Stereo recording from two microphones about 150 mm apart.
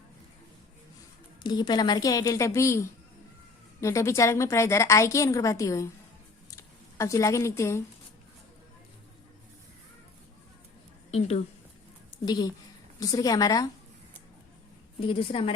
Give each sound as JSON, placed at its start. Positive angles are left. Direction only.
{"t": 1.4, "sound": "a woman's voice", "side_deg": 30}
{"t": 12.2, "sound": "a woman's voice", "side_deg": 25}
{"t": 15.0, "sound": "a woman's voice", "side_deg": 35}